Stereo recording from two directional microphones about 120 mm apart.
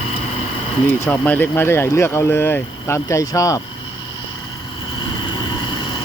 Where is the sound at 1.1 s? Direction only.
15° left (ahead or behind).